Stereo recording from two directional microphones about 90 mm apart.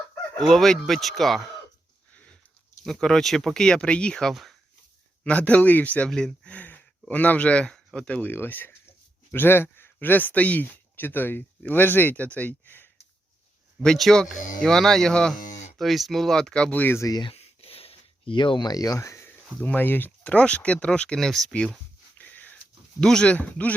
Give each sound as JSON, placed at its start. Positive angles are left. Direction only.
{"t": 0.3, "sound": "speech", "side_deg": 5}
{"t": 2.1, "sound": "biting", "side_deg": 15}
{"t": 2.8, "sound": "speech", "side_deg": 5}
{"t": 5.2, "sound": "speech", "side_deg": 15}
{"t": 8.3, "sound": "speech", "side_deg": 20}
{"t": 13.8, "sound": "speech", "side_deg": 5}
{"t": 16.8, "sound": "speech", "side_deg": 25}
{"t": 17.2, "sound": "a sound", "side_deg": 90}
{"t": 19.6, "sound": "speech", "side_deg": 20}
{"t": 22.2, "sound": "wheeze", "side_deg": 20}
{"t": 23.0, "sound": "speech", "side_deg": 10}